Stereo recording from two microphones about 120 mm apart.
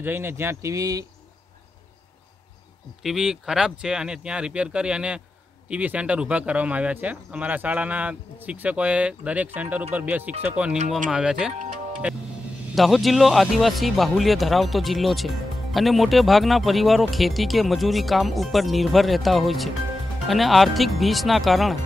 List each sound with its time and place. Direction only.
0.0 s speech: 20° right (ahead or behind)
3.0 s speech: 5° right (ahead or behind)